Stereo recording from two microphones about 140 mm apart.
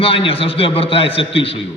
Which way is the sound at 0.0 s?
40° left (ahead or behind).